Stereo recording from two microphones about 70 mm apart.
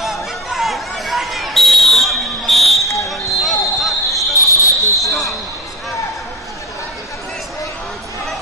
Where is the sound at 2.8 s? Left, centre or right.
Left.